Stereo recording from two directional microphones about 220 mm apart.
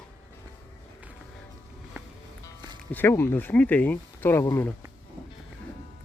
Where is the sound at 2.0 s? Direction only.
10° right (ahead or behind).